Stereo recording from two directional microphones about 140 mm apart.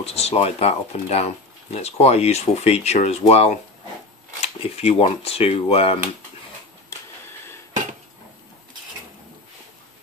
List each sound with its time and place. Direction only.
0.0 s speech: 50° left (ahead or behind)